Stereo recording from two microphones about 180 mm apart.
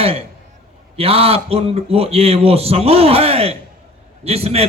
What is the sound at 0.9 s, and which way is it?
A man's voice, 35° right (ahead or behind).